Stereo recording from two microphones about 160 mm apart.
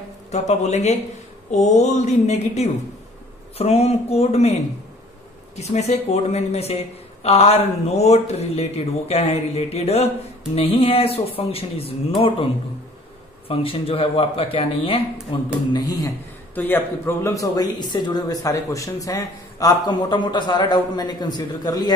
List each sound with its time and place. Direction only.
0.3 s a woman's voice: 45° left (ahead or behind)
5.6 s a woman's voice: 45° left (ahead or behind)
13.5 s speech: 35° left (ahead or behind)
16.5 s speech: 10° left (ahead or behind)